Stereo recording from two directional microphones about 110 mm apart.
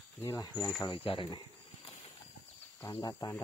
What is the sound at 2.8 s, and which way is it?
Speech, 35° left (ahead or behind).